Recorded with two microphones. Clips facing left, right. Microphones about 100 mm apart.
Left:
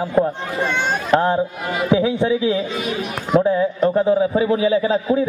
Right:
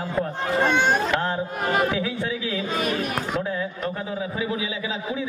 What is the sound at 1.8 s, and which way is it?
A man's voice, 25° left (ahead or behind).